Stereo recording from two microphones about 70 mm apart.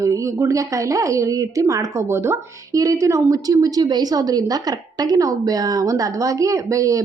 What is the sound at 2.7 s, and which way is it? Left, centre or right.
Speech, right.